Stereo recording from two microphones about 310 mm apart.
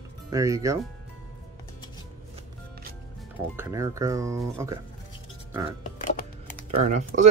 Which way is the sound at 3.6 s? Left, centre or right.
Centre.